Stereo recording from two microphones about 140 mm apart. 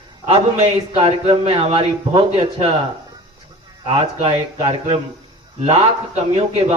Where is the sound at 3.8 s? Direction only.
45° right (ahead or behind).